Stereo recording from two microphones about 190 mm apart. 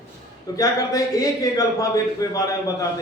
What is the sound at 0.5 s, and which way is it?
A man's voice, 20° left (ahead or behind).